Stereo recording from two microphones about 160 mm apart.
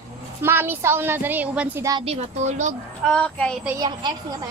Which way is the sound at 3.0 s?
5° left (ahead or behind).